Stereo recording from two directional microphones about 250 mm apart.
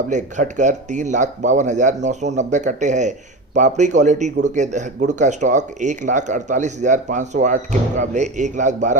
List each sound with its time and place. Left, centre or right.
0.1 s speech: right